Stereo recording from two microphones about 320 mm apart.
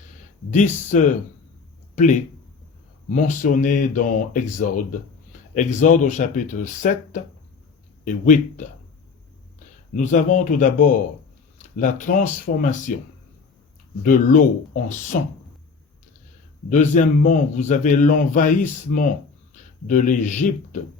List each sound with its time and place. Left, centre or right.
0.5 s a man's voice: left
3.1 s a man's voice: left
9.9 s a man's voice: left
14.0 s a man's voice: left
16.6 s a man's voice: left